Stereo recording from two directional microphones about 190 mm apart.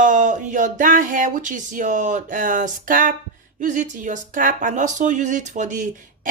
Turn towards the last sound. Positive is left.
turn(degrees=-40)  # may be behind; listen again after turning